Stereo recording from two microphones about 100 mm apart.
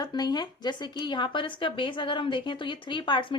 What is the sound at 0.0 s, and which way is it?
Speech, 45° left (ahead or behind).